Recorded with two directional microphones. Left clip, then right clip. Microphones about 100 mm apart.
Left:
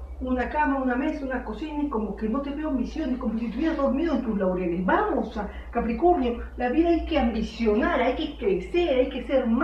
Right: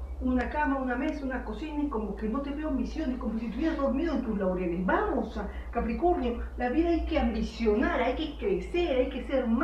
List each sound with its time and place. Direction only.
0.3 s speech: 25° left (ahead or behind)